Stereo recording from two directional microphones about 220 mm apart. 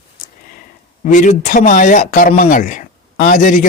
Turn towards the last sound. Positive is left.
turn(degrees=35)  # may be behind; listen again after turning